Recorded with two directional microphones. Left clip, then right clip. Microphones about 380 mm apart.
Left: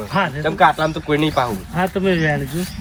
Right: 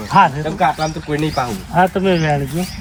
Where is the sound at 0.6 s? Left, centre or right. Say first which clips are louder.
Left 2 dB; centre.